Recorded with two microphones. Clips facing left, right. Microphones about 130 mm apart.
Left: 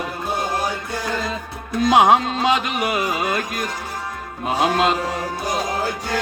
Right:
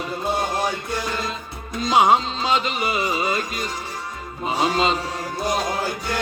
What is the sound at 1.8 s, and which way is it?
Music, 60° left (ahead or behind).